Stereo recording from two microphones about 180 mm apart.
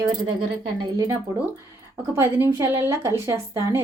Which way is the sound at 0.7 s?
20° right (ahead or behind).